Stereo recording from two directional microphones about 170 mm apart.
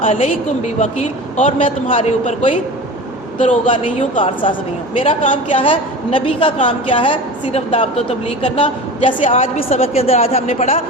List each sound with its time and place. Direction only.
0.0 s a woman's voice: 35° left (ahead or behind)
5.0 s a woman's voice: 45° left (ahead or behind)
5.5 s a woman's voice: 30° left (ahead or behind)